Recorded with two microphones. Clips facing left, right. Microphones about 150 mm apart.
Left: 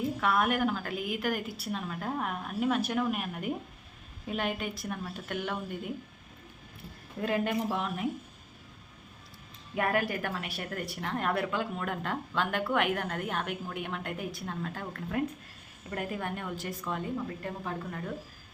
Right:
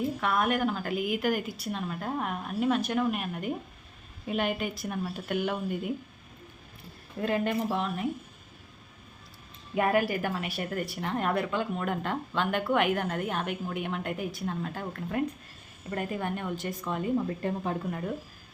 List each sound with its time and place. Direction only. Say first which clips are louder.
0.2 s a woman's voice: left 1 dB; centre (ahead or behind)
7.2 s a woman's voice: right 2 dB; 5° left (ahead or behind)
9.7 s a woman's voice: right 4 dB; 5° right (ahead or behind)
17.4 s speech: right 6 dB; 25° right (ahead or behind)